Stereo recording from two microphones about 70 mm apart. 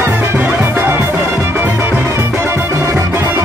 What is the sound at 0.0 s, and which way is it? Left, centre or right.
Music, right.